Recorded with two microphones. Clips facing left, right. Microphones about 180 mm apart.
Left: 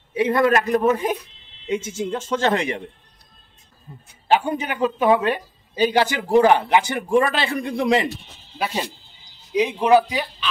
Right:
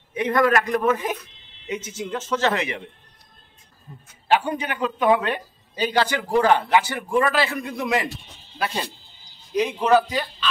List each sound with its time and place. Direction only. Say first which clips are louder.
0.4 s speech: left 1 dB; 25° left (ahead or behind)
1.7 s speech: left 5 dB; 10° left (ahead or behind)
2.0 s a man's voice: left 1 dB; 30° left (ahead or behind)
4.4 s speech: left 3 dB; 10° left (ahead or behind)
4.9 s speech: left 1 dB; 25° left (ahead or behind)
5.2 s speech: left 4 dB; 10° left (ahead or behind); by 8.1 s 30° left (ahead or behind)
8.5 s speech: left 2 dB; 10° left (ahead or behind)